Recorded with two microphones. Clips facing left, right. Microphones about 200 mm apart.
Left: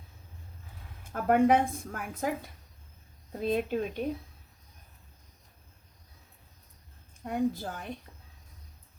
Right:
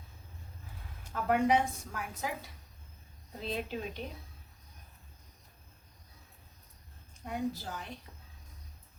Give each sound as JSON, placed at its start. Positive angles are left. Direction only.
{"t": 1.1, "sound": "a woman's voice", "side_deg": 50}
{"t": 7.3, "sound": "a woman's voice", "side_deg": 50}